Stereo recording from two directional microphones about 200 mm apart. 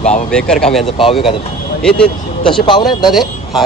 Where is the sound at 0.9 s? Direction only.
25° left (ahead or behind).